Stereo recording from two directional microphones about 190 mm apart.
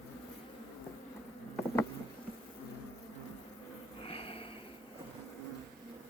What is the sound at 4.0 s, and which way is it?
Sniff, 30° left (ahead or behind).